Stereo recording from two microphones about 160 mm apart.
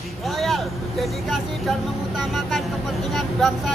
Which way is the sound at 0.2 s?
Centre (ahead or behind).